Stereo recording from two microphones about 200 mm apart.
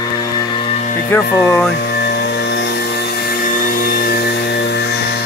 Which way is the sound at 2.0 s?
55° left (ahead or behind).